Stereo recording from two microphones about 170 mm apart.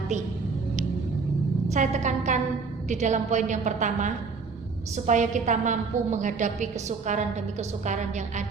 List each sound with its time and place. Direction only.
1.7 s a woman's voice: 45° right (ahead or behind)